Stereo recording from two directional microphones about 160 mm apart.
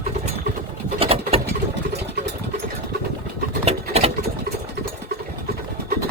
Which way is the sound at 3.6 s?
40° right (ahead or behind).